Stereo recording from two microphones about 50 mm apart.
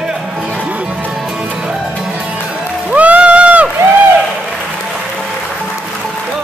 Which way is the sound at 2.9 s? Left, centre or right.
Right.